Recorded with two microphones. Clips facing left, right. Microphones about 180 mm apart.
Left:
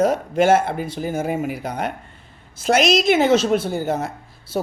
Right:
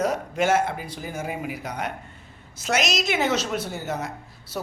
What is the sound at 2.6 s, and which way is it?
Speech, 30° left (ahead or behind).